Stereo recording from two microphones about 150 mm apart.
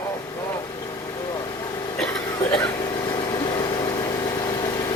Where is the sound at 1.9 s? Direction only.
5° left (ahead or behind).